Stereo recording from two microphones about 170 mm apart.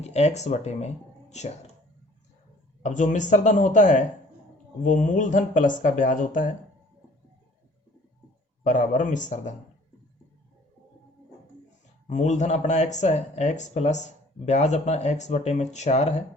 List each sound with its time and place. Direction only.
0.0 s speech: 40° left (ahead or behind)
2.8 s speech: 45° left (ahead or behind)
8.6 s speech: 45° left (ahead or behind)
12.0 s speech: 45° left (ahead or behind)